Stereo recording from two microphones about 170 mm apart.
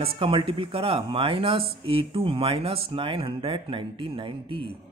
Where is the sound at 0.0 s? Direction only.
30° right (ahead or behind).